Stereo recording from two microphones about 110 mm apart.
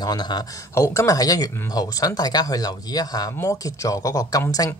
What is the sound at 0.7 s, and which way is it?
Speech, 25° left (ahead or behind).